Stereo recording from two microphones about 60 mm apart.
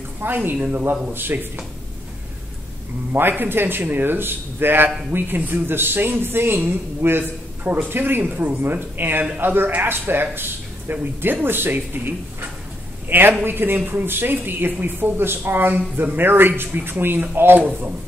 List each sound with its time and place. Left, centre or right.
0.2 s speech: right
0.6 s a man's voice: right
1.1 s speech: right
3.1 s speech: right